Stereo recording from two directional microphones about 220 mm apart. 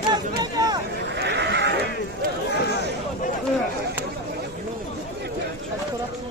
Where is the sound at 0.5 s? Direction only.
20° right (ahead or behind).